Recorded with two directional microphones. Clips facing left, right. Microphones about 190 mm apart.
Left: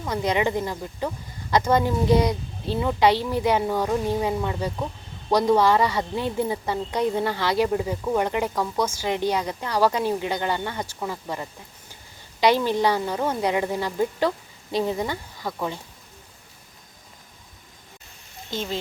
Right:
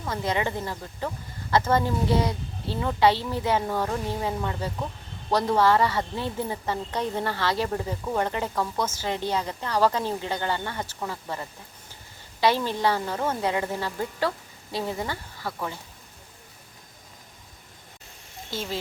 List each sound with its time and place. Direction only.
0.1 s a woman's voice: 15° left (ahead or behind)